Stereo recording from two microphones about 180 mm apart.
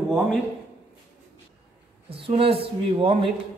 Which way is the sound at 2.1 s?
30° right (ahead or behind).